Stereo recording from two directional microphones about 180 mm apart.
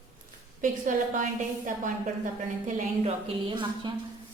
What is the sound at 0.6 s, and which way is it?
Speech, 45° right (ahead or behind).